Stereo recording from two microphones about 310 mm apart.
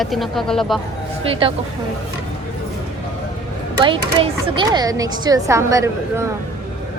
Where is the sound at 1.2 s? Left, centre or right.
Centre.